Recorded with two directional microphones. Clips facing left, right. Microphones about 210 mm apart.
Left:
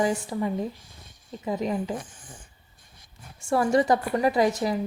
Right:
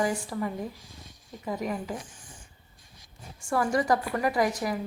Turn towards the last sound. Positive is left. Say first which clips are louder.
# left 4 dB
turn(degrees=25)  # may be behind; listen again after turning